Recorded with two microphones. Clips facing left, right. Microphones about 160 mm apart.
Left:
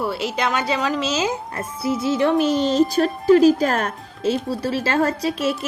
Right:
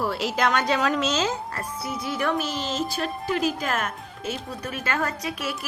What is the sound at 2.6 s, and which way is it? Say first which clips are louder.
A woman's voice: left 10 dB; 40° left (ahead or behind).